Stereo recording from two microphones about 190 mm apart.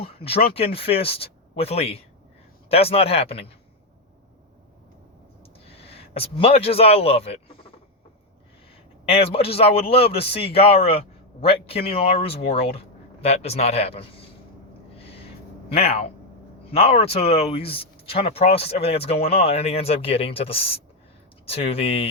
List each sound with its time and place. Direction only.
0.0 s a sound: 30° left (ahead or behind)
0.5 s a man's voice: 30° left (ahead or behind)
5.6 s a man's voice: 30° left (ahead or behind)
9.0 s a man's voice: 30° left (ahead or behind)
14.9 s owl: 30° left (ahead or behind)
15.7 s a man's voice: 30° left (ahead or behind)